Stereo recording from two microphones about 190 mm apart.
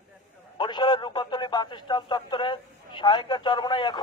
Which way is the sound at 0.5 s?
25° left (ahead or behind).